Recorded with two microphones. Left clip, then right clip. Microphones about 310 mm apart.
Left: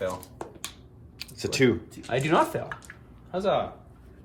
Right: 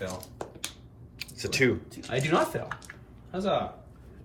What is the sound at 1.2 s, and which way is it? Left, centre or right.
Speech, centre.